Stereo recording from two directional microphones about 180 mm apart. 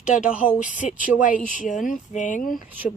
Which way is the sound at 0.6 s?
45° left (ahead or behind).